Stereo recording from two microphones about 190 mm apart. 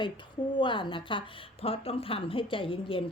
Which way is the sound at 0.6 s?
25° left (ahead or behind).